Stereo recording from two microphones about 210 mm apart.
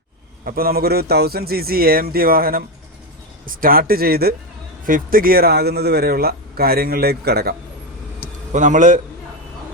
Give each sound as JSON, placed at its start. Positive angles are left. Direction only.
{"t": 0.4, "sound": "a man's voice", "side_deg": -45}
{"t": 8.5, "sound": "a man's voice", "side_deg": -35}